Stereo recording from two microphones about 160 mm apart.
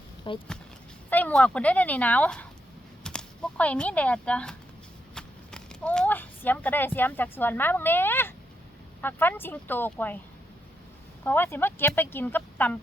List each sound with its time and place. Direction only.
0.3 s speech: 30° left (ahead or behind)
1.1 s speech: 10° left (ahead or behind)
11.2 s speech: 10° left (ahead or behind)